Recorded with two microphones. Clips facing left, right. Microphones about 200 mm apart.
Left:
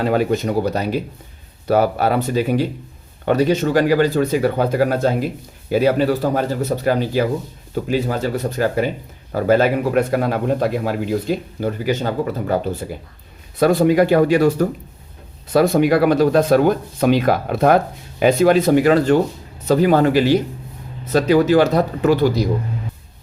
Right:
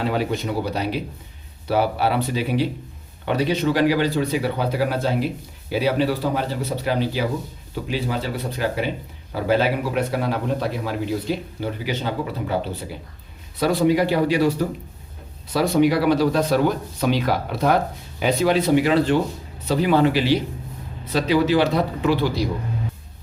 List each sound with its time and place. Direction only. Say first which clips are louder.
0.0 s speech: left 5 dB; 50° left (ahead or behind)